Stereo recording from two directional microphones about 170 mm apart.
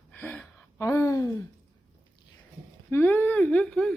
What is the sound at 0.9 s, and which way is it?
Speech, 20° left (ahead or behind).